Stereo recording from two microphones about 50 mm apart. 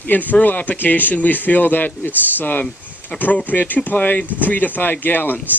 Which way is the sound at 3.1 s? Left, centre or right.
Centre.